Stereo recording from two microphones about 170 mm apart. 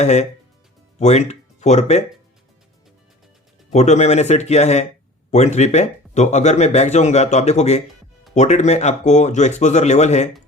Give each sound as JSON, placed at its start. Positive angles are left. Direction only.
{"t": 0.0, "sound": "speech", "side_deg": 40}
{"t": 3.7, "sound": "speech", "side_deg": 40}